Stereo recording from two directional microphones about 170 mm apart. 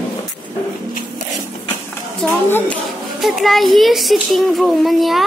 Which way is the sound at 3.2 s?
Centre (ahead or behind).